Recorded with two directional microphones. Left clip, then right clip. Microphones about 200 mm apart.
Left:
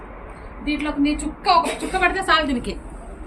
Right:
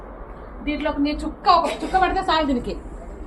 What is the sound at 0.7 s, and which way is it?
Speech, 10° right (ahead or behind).